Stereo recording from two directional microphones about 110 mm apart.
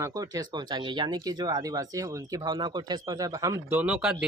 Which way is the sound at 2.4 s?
40° right (ahead or behind).